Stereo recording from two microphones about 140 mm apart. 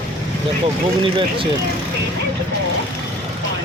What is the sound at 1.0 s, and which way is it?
Speech, 40° right (ahead or behind).